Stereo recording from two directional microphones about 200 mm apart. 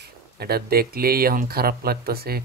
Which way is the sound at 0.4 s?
50° right (ahead or behind).